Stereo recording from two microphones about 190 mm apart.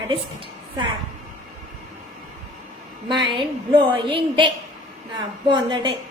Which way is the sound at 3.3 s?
25° right (ahead or behind).